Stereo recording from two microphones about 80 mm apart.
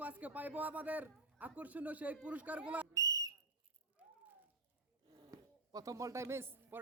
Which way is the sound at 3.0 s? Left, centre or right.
Right.